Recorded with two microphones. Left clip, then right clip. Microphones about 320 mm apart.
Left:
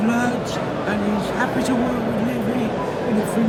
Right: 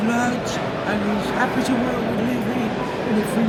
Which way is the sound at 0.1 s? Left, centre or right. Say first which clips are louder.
Right 1 dB; centre.